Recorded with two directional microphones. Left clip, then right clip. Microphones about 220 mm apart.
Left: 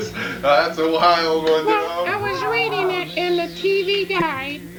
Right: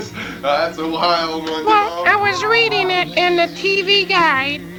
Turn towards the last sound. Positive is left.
turn(degrees=-10)  # may be behind; listen again after turning